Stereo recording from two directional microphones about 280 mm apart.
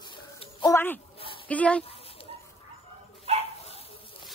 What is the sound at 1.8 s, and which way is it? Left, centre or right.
Dog, centre.